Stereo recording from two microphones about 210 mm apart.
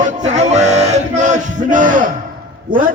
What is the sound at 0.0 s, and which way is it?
Music, 35° right (ahead or behind).